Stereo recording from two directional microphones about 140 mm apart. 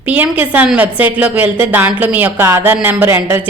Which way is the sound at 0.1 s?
10° right (ahead or behind).